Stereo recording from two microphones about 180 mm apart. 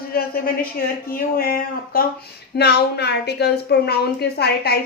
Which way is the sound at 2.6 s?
65° left (ahead or behind).